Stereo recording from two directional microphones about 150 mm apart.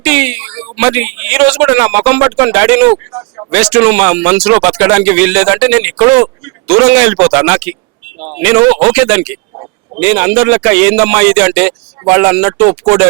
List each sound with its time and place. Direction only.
0.0 s speech: 5° right (ahead or behind)
3.1 s a sound: 25° right (ahead or behind)
3.5 s speech: 5° right (ahead or behind)